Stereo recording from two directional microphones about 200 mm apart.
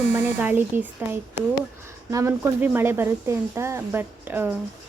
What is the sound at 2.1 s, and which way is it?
Speech, 10° right (ahead or behind).